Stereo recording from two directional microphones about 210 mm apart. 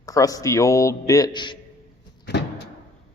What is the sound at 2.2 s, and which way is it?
Cupboard open or close, 55° left (ahead or behind).